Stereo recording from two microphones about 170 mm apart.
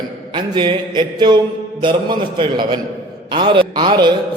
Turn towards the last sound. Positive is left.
turn(degrees=-25)  # may be behind; listen again after turning